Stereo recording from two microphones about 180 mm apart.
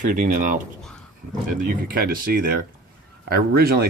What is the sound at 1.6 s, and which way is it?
Speech, 55° right (ahead or behind).